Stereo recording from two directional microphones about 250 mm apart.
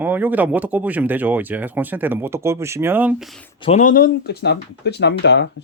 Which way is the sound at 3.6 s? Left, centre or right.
Left.